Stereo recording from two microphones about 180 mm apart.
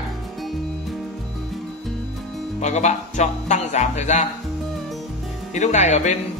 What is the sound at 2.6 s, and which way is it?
Speech, 40° left (ahead or behind).